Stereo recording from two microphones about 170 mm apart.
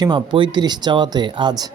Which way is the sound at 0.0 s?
25° right (ahead or behind).